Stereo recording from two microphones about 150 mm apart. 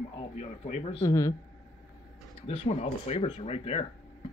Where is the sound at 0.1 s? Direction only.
40° left (ahead or behind).